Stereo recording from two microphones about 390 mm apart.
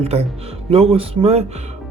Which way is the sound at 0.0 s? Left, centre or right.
Centre.